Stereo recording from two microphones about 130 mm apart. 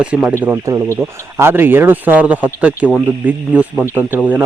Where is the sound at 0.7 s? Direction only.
25° right (ahead or behind).